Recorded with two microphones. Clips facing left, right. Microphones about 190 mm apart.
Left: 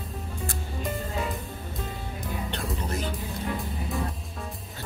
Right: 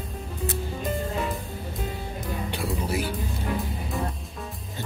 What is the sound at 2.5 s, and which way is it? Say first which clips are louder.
Music: right 5 dB; 10° right (ahead or behind).